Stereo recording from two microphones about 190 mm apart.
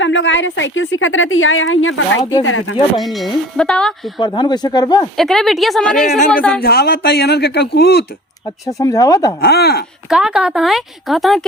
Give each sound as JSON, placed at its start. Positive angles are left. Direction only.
{"t": 0.0, "sound": "a woman's voice", "side_deg": 80}
{"t": 3.0, "sound": "speech", "side_deg": 0}
{"t": 4.2, "sound": "speech", "side_deg": 25}
{"t": 5.1, "sound": "speech", "side_deg": 0}
{"t": 6.1, "sound": "speech", "side_deg": 40}
{"t": 6.5, "sound": "speech", "side_deg": 55}
{"t": 8.6, "sound": "speech", "side_deg": 15}
{"t": 9.4, "sound": "speech", "side_deg": 55}
{"t": 10.1, "sound": "speech", "side_deg": -5}